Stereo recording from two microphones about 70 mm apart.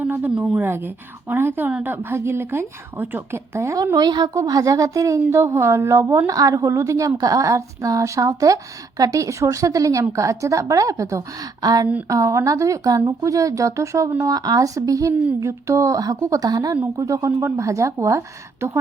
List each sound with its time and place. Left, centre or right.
0.1 s a sound: right
0.5 s a woman's voice: right
3.9 s a woman's voice: right
4.4 s speech: right
12.0 s speech: right
14.3 s speech: right
17.2 s speech: right